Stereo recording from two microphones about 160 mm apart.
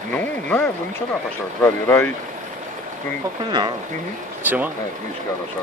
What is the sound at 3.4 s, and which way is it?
Speech, 25° right (ahead or behind).